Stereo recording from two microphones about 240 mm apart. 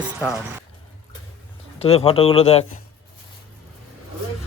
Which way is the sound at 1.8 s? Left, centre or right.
Left.